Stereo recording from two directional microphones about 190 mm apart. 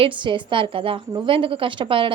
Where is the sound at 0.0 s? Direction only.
25° right (ahead or behind).